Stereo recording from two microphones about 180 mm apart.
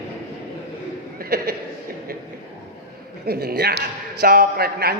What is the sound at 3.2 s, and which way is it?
A man's voice, 60° right (ahead or behind).